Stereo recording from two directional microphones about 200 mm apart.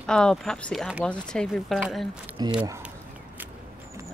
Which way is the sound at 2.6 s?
15° right (ahead or behind).